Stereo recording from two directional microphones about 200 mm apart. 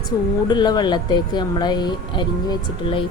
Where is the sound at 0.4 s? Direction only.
20° left (ahead or behind).